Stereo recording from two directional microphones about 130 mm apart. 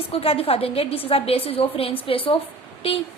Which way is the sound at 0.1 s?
50° left (ahead or behind).